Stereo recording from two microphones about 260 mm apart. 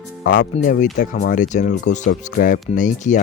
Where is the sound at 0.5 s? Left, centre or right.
Left.